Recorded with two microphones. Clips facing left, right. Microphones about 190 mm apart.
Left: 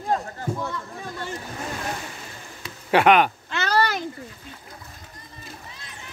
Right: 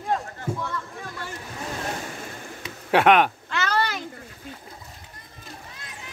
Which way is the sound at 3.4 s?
25° left (ahead or behind).